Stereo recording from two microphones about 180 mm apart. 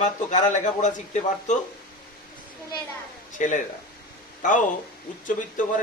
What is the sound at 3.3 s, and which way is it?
Speech, 45° left (ahead or behind).